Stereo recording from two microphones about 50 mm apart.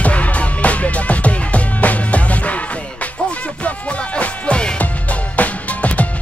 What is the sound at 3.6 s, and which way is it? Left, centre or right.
Music, left.